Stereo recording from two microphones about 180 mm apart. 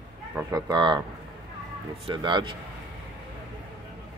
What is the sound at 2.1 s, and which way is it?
Speech, 25° right (ahead or behind).